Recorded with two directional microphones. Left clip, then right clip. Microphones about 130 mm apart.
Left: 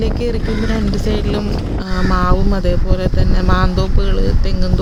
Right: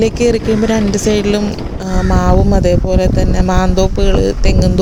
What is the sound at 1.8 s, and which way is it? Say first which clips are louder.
Speech: right 3 dB; 40° right (ahead or behind).